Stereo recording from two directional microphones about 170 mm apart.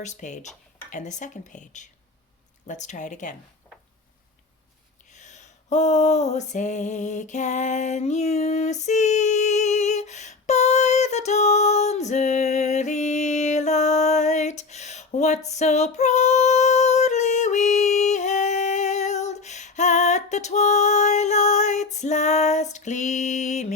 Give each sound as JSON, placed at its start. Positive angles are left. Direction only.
{"t": 0.0, "sound": "speech", "side_deg": 45}
{"t": 5.1, "sound": "a sound", "side_deg": 45}
{"t": 15.4, "sound": "female singing", "side_deg": 40}